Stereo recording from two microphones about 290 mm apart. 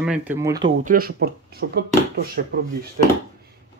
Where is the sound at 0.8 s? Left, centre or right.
Right.